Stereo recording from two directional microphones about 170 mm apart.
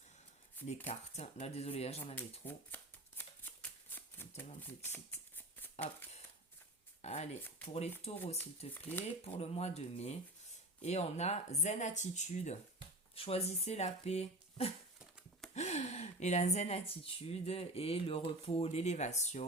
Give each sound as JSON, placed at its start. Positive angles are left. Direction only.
{"t": 0.9, "sound": "speech", "side_deg": 40}
{"t": 2.4, "sound": "shuffling cards", "side_deg": 10}
{"t": 4.4, "sound": "speech", "side_deg": 15}
{"t": 7.0, "sound": "speech", "side_deg": 40}
{"t": 8.7, "sound": "speech", "side_deg": 10}
{"t": 9.2, "sound": "speech", "side_deg": 35}